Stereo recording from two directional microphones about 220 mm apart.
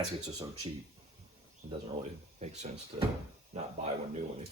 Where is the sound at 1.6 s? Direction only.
30° right (ahead or behind).